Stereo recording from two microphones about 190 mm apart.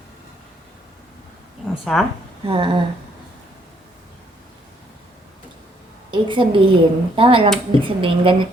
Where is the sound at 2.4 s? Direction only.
25° right (ahead or behind).